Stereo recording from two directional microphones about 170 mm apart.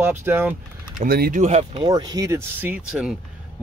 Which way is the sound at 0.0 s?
10° right (ahead or behind).